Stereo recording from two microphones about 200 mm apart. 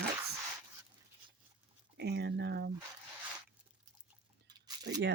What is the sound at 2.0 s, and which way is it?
Speech, 55° right (ahead or behind).